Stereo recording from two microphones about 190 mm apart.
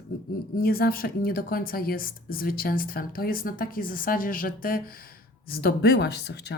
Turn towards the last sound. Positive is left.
turn(degrees=60)  # may be behind; listen again after turning